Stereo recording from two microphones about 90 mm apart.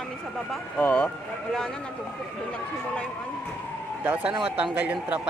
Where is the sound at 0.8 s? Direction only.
15° left (ahead or behind).